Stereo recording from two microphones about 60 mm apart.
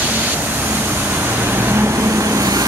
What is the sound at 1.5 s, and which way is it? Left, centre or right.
Vehicle, right.